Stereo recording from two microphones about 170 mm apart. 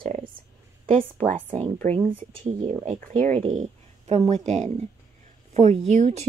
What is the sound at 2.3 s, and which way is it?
Speech, 30° right (ahead or behind).